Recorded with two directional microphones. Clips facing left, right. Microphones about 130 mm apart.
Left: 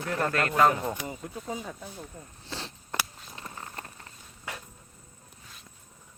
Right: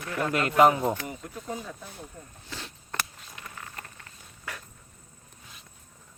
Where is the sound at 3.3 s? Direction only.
30° left (ahead or behind).